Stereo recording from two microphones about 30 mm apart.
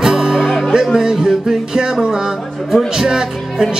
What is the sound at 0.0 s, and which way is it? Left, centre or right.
Music, centre.